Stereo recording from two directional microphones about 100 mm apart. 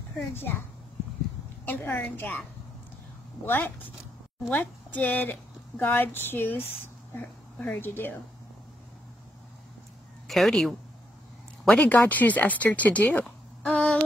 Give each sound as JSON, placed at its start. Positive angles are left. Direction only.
{"t": 0.3, "sound": "speech", "side_deg": 25}
{"t": 1.7, "sound": "speech", "side_deg": 20}
{"t": 3.4, "sound": "a woman's voice", "side_deg": 20}
{"t": 10.2, "sound": "a man's voice", "side_deg": 0}
{"t": 13.2, "sound": "a sound", "side_deg": 10}